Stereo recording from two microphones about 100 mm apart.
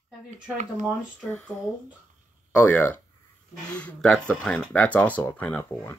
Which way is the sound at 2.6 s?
20° left (ahead or behind).